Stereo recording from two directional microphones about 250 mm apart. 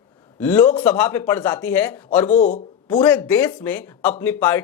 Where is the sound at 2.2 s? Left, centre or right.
Left.